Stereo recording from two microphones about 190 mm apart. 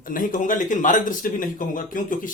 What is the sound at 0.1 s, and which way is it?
A man's voice, 45° left (ahead or behind).